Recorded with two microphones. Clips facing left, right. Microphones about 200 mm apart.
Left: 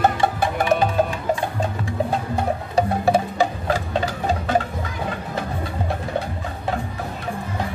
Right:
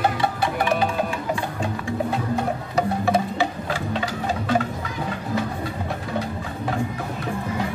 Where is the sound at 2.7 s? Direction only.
30° left (ahead or behind).